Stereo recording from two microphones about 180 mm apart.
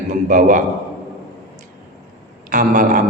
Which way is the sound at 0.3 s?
45° right (ahead or behind).